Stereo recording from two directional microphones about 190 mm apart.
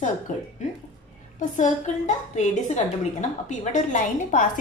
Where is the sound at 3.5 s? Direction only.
40° left (ahead or behind).